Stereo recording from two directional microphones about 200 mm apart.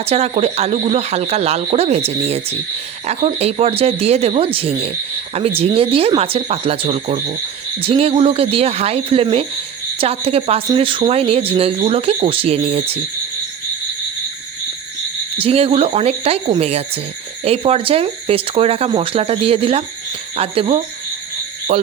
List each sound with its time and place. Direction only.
0.0 s speech: 30° right (ahead or behind)
15.4 s speech: 30° right (ahead or behind)